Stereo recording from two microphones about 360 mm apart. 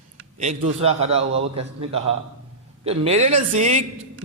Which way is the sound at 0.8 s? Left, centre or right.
Centre.